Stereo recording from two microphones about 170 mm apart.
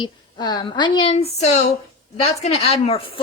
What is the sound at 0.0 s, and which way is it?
Speech, 25° left (ahead or behind).